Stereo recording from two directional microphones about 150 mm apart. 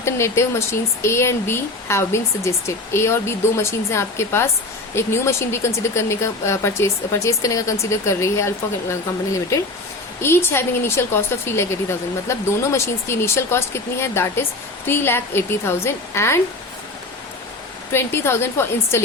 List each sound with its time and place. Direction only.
0.0 s speech: 20° left (ahead or behind)
10.2 s speech: 15° left (ahead or behind)
17.9 s speech: 15° left (ahead or behind)